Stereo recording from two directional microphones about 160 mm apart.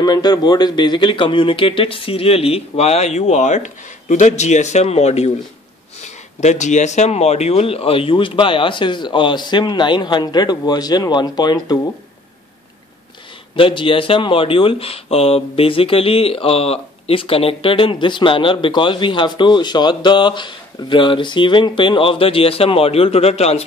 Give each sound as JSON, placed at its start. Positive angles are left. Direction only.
{"t": 0.0, "sound": "speech", "side_deg": 25}
{"t": 13.6, "sound": "speech", "side_deg": 35}